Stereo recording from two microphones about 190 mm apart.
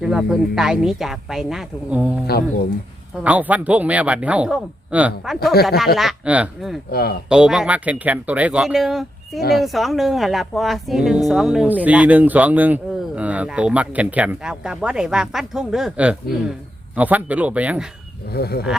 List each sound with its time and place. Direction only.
0.0 s speech: centre (ahead or behind)
2.2 s speech: 55° left (ahead or behind)
3.2 s speech: 10° right (ahead or behind)
6.9 s speech: 55° left (ahead or behind)
7.3 s speech: 5° right (ahead or behind)
18.3 s speech: 55° left (ahead or behind)